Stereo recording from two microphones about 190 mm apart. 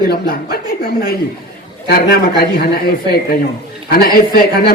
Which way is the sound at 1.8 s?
55° left (ahead or behind).